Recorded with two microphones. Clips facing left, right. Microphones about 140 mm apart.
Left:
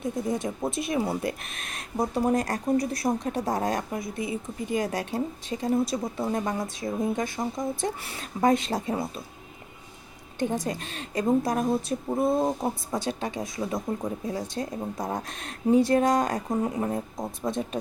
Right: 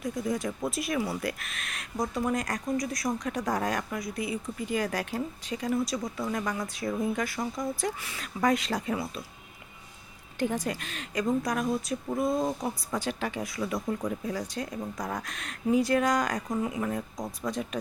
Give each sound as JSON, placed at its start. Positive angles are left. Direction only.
{"t": 0.0, "sound": "speech", "side_deg": 25}
{"t": 10.4, "sound": "speech", "side_deg": 25}